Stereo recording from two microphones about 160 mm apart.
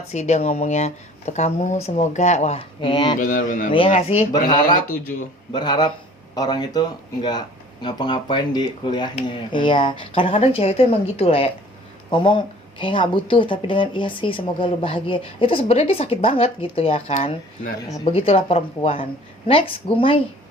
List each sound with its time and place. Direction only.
0.1 s speech: 45° left (ahead or behind); by 3.2 s 30° left (ahead or behind)
3.2 s speech: 60° left (ahead or behind)
3.7 s speech: 35° left (ahead or behind)
4.3 s speech: 25° left (ahead or behind)